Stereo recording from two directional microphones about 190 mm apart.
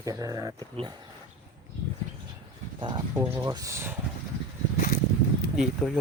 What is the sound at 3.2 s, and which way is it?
Speech, 10° right (ahead or behind).